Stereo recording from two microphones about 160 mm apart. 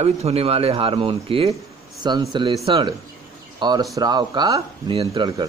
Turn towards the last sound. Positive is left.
turn(degrees=-25)  # may be behind; listen again after turning